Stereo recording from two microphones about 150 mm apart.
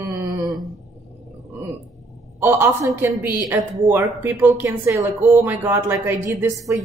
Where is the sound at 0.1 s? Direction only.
25° right (ahead or behind).